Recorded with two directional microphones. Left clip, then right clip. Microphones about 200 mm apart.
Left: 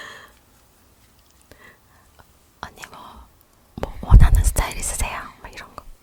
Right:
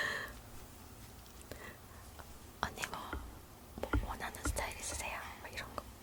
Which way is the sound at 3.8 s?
40° left (ahead or behind).